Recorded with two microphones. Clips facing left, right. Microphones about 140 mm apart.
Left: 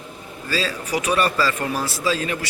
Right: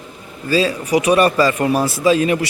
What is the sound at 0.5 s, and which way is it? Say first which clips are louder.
Speech: right 8 dB; 20° right (ahead or behind).